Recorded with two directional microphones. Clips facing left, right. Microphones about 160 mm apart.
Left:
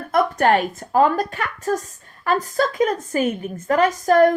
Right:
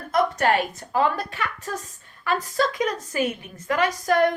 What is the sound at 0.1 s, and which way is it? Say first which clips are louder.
A woman's voice: left 4 dB; 50° left (ahead or behind).